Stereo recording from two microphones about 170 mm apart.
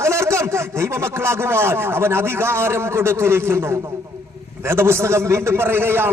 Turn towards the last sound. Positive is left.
turn(degrees=-15)  # may be behind; listen again after turning